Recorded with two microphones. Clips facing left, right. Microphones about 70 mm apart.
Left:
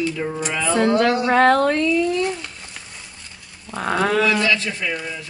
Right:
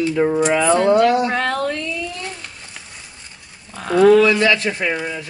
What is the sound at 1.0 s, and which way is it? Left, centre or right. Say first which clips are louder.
Speech: left 1 dB; left.